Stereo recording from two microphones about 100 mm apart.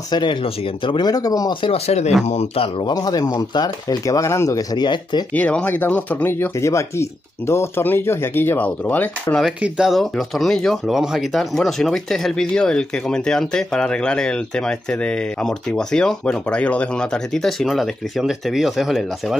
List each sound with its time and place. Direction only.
0.1 s speech: 50° left (ahead or behind)
1.6 s speech: 80° left
2.8 s speech: 40° left (ahead or behind)
5.3 s speech: 15° left (ahead or behind)
9.6 s speech: 5° right (ahead or behind)